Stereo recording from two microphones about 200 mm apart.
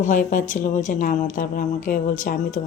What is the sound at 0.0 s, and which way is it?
Speech, 40° left (ahead or behind).